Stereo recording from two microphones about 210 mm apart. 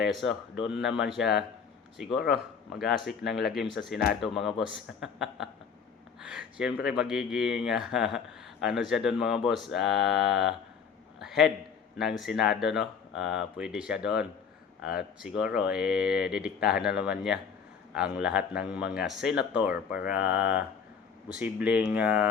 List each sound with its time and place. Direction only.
0.0 s speech: centre (ahead or behind)
11.2 s a sound: centre (ahead or behind)
11.9 s speech: centre (ahead or behind)